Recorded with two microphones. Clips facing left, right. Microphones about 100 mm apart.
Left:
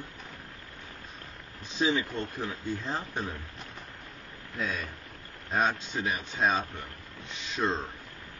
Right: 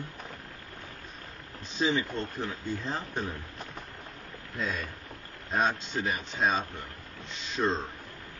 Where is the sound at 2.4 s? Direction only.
5° left (ahead or behind).